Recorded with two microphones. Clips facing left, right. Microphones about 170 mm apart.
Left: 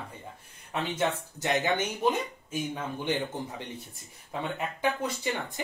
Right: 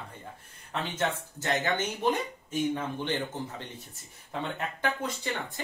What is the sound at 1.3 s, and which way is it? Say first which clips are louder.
Speech: left 2 dB; 15° left (ahead or behind).